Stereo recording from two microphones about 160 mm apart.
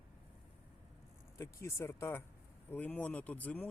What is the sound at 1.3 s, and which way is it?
Speech, 15° left (ahead or behind).